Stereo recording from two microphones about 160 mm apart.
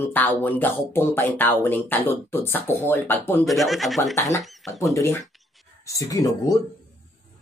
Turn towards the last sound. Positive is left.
turn(degrees=20)  # may be behind; listen again after turning